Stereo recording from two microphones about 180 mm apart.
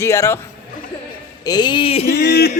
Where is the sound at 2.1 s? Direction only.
65° left (ahead or behind).